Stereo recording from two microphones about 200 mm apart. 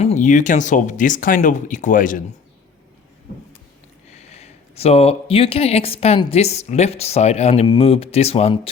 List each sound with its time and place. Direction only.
0.0 s speech: 35° left (ahead or behind)
4.2 s speech: 30° left (ahead or behind)